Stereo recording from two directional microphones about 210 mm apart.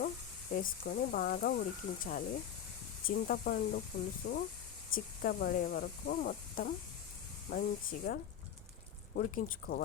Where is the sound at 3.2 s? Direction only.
40° left (ahead or behind).